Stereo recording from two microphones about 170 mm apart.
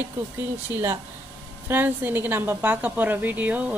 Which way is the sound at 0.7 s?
15° right (ahead or behind).